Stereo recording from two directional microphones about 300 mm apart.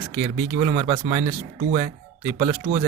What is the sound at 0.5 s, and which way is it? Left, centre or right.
Speech, right.